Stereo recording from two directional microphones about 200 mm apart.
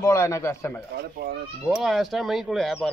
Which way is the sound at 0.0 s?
15° left (ahead or behind).